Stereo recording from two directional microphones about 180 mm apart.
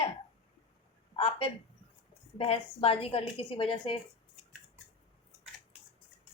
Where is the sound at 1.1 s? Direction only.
30° left (ahead or behind).